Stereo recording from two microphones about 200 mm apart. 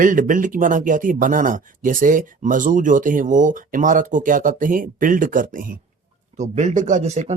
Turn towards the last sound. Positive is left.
turn(degrees=-35)  # may be behind; listen again after turning